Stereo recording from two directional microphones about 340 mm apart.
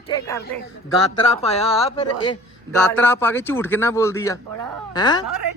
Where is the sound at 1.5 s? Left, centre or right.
Centre.